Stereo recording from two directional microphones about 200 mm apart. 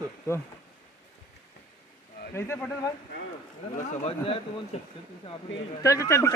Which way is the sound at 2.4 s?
10° left (ahead or behind).